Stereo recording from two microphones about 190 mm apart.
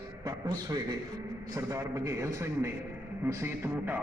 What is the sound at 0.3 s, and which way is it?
A man's voice, 20° right (ahead or behind).